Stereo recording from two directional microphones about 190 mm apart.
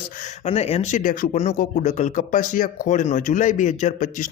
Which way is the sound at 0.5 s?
30° left (ahead or behind).